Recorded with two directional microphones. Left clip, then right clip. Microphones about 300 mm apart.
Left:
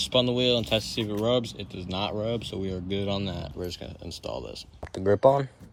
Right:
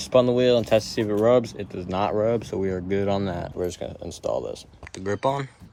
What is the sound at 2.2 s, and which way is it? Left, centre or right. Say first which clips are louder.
Speech: right 7 dB; centre.